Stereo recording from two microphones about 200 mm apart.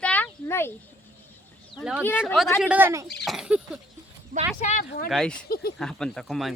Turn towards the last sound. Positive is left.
turn(degrees=0)  # may be behind; listen again after turning